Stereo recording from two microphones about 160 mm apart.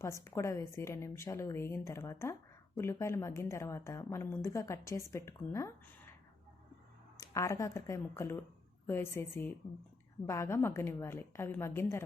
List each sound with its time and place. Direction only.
0.0 s a woman's voice: 15° left (ahead or behind)
7.2 s a woman's voice: 20° left (ahead or behind)